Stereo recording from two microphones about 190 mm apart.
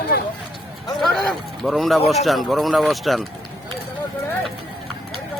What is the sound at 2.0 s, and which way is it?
Speech, centre (ahead or behind).